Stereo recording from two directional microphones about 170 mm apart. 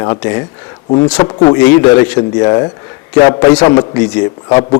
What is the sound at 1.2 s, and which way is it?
A man's voice, 20° left (ahead or behind).